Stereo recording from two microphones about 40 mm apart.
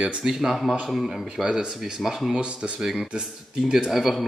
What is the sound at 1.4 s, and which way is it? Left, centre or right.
Speech, right.